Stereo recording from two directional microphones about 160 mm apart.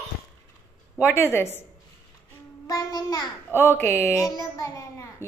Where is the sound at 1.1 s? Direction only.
15° left (ahead or behind).